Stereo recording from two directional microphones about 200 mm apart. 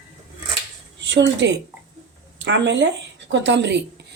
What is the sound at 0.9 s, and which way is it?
A woman's voice, 60° right (ahead or behind).